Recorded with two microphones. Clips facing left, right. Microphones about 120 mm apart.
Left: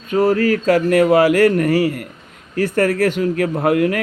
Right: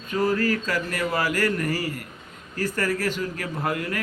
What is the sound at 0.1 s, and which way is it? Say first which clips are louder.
Speech: left 8 dB; 55° left (ahead or behind).